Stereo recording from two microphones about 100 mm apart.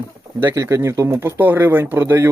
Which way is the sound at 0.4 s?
35° right (ahead or behind).